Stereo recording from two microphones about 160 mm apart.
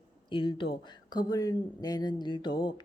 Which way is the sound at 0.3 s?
30° left (ahead or behind).